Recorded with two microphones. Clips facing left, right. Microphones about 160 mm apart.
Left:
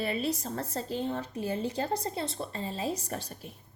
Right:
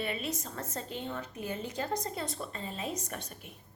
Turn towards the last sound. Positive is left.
turn(degrees=35)  # may be behind; listen again after turning